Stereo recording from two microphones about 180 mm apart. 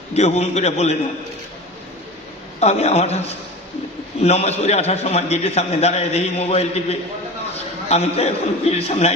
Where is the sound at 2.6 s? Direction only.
35° left (ahead or behind).